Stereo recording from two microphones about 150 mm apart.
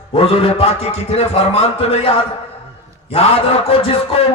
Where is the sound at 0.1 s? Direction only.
40° left (ahead or behind).